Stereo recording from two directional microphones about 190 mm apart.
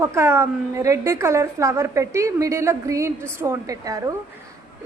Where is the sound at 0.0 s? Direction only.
15° right (ahead or behind).